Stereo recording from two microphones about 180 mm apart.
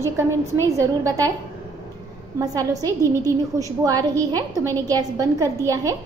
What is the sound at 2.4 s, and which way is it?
A woman's voice, 20° right (ahead or behind).